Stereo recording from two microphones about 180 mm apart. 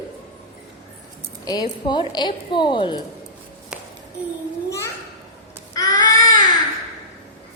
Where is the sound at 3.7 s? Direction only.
5° right (ahead or behind).